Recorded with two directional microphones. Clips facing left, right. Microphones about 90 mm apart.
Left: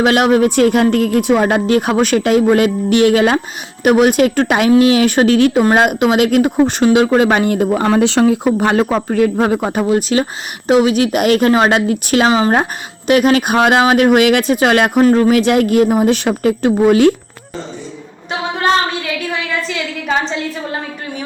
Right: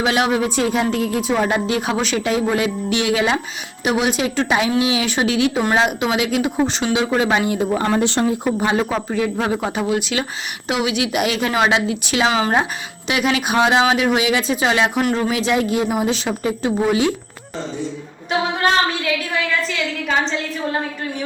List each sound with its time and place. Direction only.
0.0 s speech: 50° left (ahead or behind); by 8.4 s 90° left
8.5 s speech: 55° left (ahead or behind)
12.3 s speech: 40° left (ahead or behind); by 17.1 s 55° left (ahead or behind)